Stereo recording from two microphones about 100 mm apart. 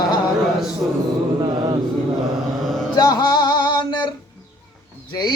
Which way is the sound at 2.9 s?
40° left (ahead or behind).